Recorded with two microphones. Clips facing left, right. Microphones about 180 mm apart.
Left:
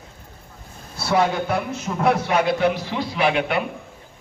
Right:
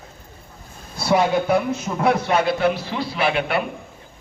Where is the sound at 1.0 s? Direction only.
15° right (ahead or behind).